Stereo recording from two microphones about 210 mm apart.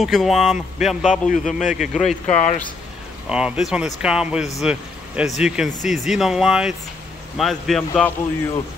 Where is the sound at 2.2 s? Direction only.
35° left (ahead or behind).